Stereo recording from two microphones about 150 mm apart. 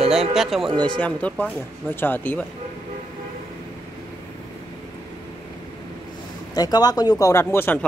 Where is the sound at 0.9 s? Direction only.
10° left (ahead or behind).